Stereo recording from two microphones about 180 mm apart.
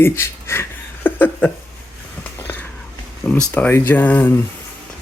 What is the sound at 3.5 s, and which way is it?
Speech, 10° left (ahead or behind).